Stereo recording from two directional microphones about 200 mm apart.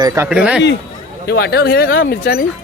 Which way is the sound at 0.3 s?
5° right (ahead or behind).